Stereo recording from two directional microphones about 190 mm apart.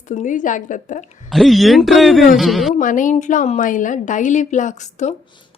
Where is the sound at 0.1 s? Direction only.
40° left (ahead or behind).